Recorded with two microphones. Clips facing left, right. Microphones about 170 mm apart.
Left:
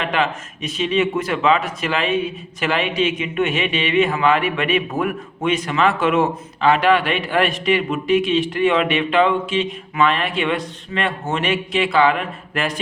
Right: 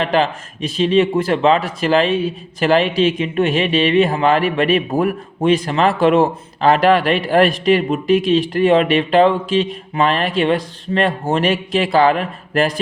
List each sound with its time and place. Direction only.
0.0 s speech: 35° right (ahead or behind)